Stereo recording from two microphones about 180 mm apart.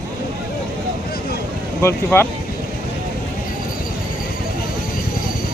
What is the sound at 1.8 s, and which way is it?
Speech, 15° left (ahead or behind).